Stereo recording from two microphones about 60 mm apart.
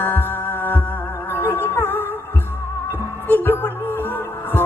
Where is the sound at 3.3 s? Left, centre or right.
Left.